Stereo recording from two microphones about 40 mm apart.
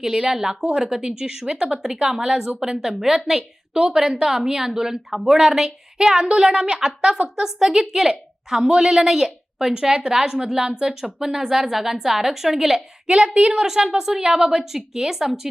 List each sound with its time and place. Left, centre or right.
0.0 s a woman's voice: centre
13.1 s a woman's voice: right
13.6 s a woman's voice: centre